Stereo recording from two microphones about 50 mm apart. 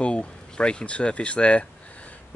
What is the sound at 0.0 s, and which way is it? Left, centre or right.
Speech, left.